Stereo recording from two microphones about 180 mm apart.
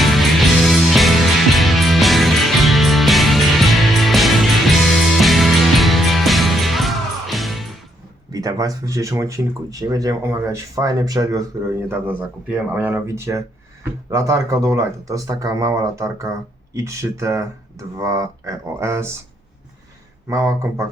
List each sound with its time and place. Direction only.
0.0 s music: centre (ahead or behind)
8.3 s speech: 20° right (ahead or behind)
20.2 s speech: 15° right (ahead or behind)